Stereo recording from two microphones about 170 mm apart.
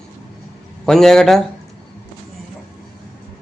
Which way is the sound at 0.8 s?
Centre (ahead or behind).